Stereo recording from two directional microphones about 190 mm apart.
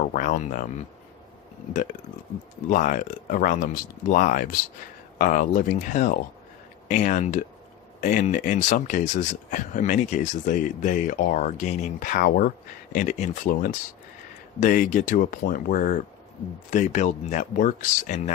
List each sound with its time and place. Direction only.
0.0 s speech: 40° left (ahead or behind)
1.7 s speech: 45° left (ahead or behind)